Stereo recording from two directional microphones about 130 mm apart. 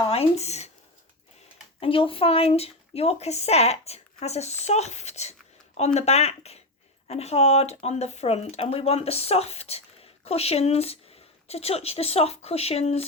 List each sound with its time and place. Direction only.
0.1 s speech: 55° left (ahead or behind)
1.8 s speech: 45° left (ahead or behind)